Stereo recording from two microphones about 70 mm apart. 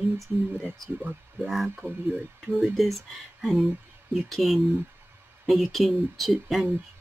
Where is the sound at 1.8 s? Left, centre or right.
Right.